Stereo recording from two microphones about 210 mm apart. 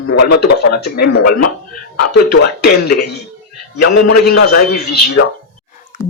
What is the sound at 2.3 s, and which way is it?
Speech, 50° left (ahead or behind).